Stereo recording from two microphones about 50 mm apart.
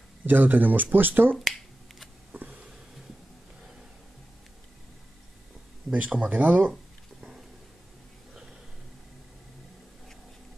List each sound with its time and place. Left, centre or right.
0.3 s speech: right
2.3 s a sound: right
5.9 s speech: right
6.4 s speech: right